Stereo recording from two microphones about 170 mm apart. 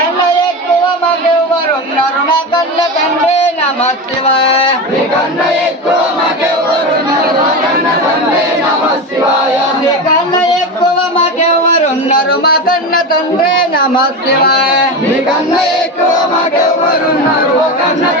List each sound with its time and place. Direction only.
4.4 s speech: 35° left (ahead or behind)
12.0 s music: 60° left (ahead or behind)
14.4 s speech: 65° left (ahead or behind)